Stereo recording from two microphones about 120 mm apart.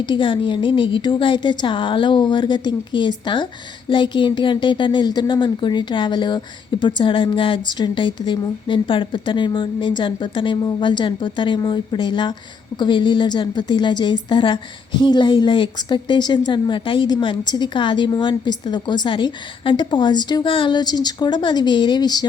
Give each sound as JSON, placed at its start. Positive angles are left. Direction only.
{"t": 0.0, "sound": "a woman's voice", "side_deg": 45}